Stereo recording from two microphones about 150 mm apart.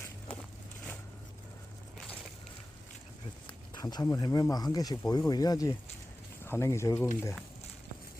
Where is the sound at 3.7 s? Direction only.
25° left (ahead or behind).